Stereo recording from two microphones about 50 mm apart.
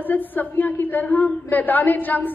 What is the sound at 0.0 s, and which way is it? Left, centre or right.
A woman's voice, left.